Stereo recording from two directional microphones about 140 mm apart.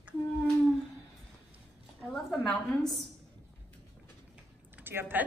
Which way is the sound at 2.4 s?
5° left (ahead or behind).